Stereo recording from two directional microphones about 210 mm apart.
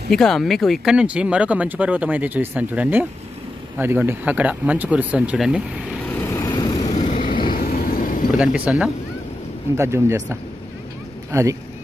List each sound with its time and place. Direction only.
0.1 s speech: centre (ahead or behind)
6.1 s vehicle: 10° left (ahead or behind)
6.9 s vehicle: 35° left (ahead or behind)
8.5 s speech: 5° right (ahead or behind)